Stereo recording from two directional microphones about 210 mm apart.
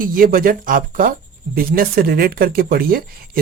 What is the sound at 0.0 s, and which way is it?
Speech, 40° right (ahead or behind).